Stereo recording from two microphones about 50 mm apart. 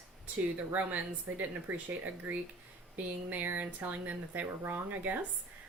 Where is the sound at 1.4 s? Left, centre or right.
Right.